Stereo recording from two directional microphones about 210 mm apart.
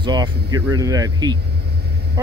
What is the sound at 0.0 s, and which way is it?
Speech, 20° right (ahead or behind).